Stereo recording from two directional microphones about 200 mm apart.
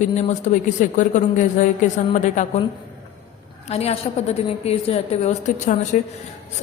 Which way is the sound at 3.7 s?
30° left (ahead or behind).